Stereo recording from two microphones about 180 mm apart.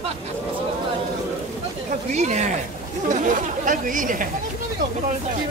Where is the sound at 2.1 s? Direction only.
40° right (ahead or behind).